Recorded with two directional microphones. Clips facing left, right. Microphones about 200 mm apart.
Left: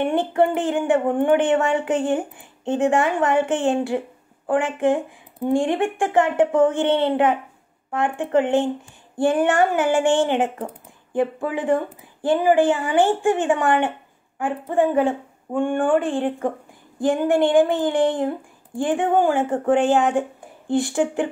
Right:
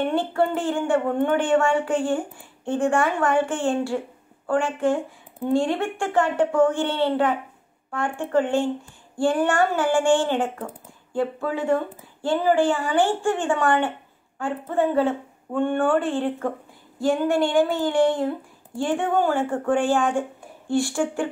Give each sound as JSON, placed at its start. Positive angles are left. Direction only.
{"t": 0.0, "sound": "a woman's voice", "side_deg": 15}